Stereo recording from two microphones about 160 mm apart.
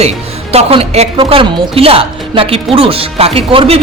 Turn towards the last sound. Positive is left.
turn(degrees=-40)  # may be behind; listen again after turning